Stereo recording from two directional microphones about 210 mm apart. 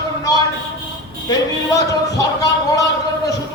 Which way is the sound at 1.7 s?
15° left (ahead or behind).